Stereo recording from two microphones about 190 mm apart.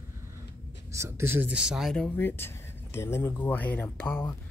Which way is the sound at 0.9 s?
15° right (ahead or behind).